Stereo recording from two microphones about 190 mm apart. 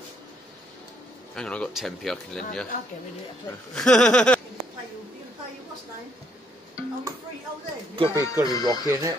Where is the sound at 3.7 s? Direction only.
5° left (ahead or behind).